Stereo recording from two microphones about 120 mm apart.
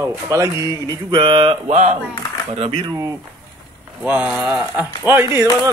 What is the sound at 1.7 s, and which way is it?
Speech, 90° right.